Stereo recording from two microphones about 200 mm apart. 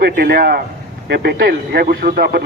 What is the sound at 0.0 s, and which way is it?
A man's voice, 50° right (ahead or behind).